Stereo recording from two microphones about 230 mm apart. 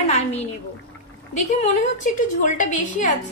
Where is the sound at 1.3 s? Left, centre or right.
Left.